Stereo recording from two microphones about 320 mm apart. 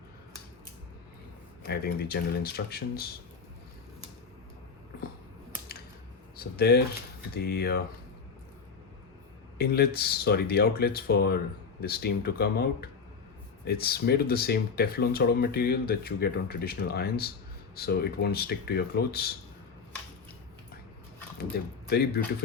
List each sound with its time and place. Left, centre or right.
1.6 s speech: left
6.3 s speech: left
9.6 s speech: left
21.5 s speech: left